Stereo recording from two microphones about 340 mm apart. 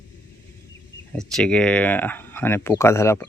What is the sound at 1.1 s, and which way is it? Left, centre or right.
Speech, centre.